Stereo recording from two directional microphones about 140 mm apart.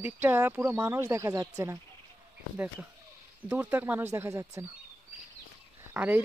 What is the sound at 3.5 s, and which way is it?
Speech, 10° right (ahead or behind).